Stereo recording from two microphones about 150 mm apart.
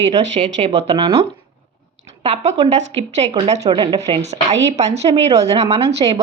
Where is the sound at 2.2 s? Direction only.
45° right (ahead or behind).